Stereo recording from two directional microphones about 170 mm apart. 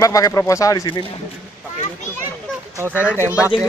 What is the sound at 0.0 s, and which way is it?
Speech, 20° left (ahead or behind).